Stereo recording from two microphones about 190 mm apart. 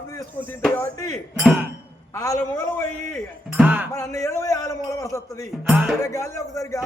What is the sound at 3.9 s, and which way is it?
A man's voice, 15° left (ahead or behind).